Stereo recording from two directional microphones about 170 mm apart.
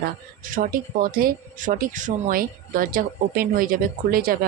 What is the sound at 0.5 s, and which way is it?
Speech, 55° right (ahead or behind).